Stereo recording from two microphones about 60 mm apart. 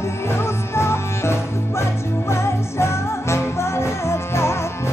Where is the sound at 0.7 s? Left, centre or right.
Left.